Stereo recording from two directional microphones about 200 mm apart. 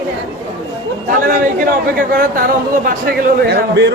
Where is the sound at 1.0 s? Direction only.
45° right (ahead or behind).